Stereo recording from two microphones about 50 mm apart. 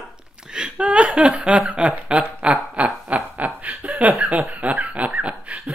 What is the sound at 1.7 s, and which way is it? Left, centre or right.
Snicker, right.